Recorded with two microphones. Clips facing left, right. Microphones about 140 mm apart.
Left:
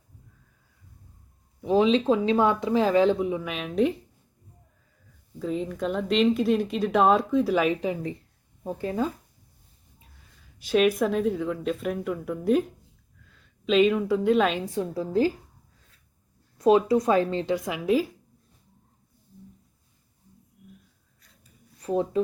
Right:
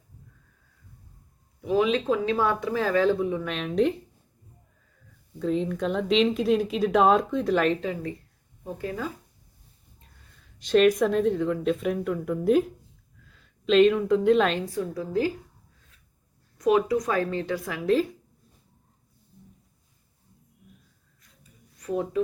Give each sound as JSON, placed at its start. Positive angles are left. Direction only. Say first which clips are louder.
{"t": 1.6, "sound": "speech", "louder": "left 3 dB", "side_deg": 30}
{"t": 5.4, "sound": "a woman's voice", "louder": "right 2 dB", "side_deg": 0}
{"t": 10.0, "sound": "a woman's voice", "louder": "left 1 dB", "side_deg": 5}
{"t": 14.8, "sound": "a woman's voice", "louder": "left 5 dB", "side_deg": 30}
{"t": 16.6, "sound": "speech", "louder": "left 2 dB", "side_deg": 30}
{"t": 21.8, "sound": "speech", "louder": "left 2 dB", "side_deg": 30}